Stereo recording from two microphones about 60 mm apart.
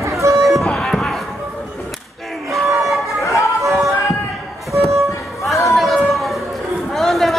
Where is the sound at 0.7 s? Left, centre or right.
Centre.